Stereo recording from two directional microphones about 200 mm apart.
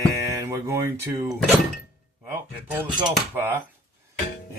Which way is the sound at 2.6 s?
10° right (ahead or behind).